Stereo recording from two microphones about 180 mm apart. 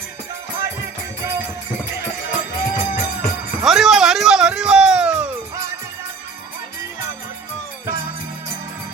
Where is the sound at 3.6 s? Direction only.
Centre (ahead or behind).